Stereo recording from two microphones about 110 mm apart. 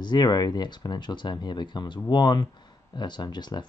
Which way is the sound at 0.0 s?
40° left (ahead or behind).